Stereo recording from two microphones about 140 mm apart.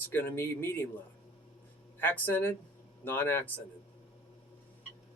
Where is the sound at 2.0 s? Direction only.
15° left (ahead or behind).